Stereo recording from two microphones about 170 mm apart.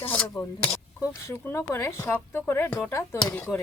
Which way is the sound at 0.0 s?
10° left (ahead or behind).